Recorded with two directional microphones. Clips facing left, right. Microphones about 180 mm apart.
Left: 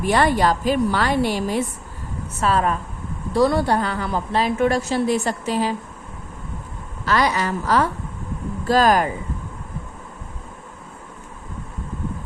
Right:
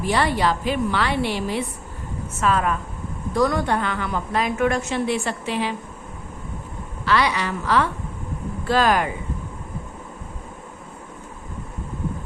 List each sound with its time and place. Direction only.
0.0 s a woman's voice: 50° left (ahead or behind)
7.0 s a woman's voice: 45° left (ahead or behind)